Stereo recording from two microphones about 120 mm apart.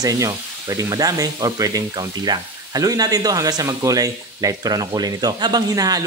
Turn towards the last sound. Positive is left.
turn(degrees=-30)  # may be behind; listen again after turning